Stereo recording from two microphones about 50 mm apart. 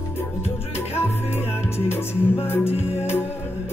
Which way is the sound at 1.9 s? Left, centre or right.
Left.